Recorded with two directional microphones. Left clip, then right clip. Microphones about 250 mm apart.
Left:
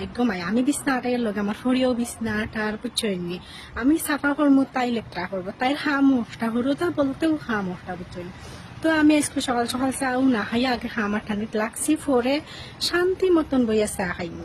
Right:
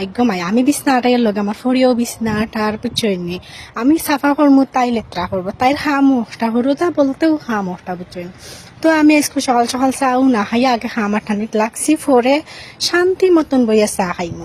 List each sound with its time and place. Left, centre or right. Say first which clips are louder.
0.2 s speech: right 8 dB; right
8.8 s speech: right 8 dB; right